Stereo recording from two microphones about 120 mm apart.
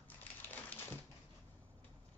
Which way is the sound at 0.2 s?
15° left (ahead or behind).